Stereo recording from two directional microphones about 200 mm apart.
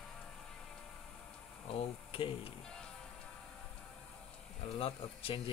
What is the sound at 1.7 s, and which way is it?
Speech, 30° left (ahead or behind).